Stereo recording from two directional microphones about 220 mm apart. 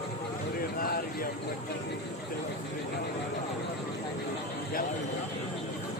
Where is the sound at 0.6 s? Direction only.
40° left (ahead or behind).